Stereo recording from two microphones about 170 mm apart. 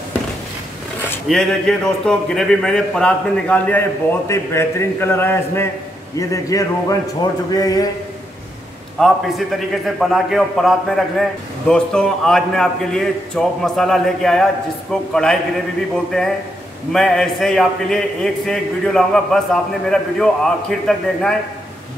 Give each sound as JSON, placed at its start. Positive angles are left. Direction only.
{"t": 1.2, "sound": "a man's voice", "side_deg": 0}
{"t": 9.0, "sound": "a man's voice", "side_deg": 0}
{"t": 16.9, "sound": "a man's voice", "side_deg": 5}